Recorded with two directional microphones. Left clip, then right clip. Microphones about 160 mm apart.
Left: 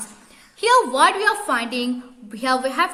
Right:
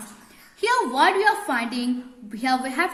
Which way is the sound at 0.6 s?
25° left (ahead or behind).